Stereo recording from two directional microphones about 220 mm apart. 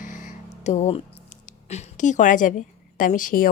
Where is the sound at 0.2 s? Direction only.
35° left (ahead or behind).